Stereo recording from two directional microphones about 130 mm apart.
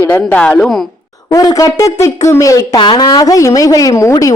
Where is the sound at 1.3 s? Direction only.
25° left (ahead or behind).